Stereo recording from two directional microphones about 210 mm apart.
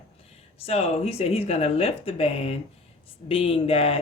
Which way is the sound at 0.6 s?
30° left (ahead or behind).